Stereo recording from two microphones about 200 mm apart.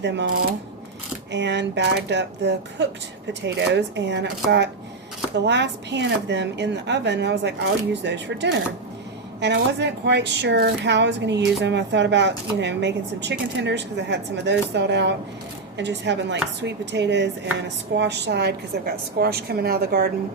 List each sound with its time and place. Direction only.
0.0 s a woman's voice: 60° right (ahead or behind)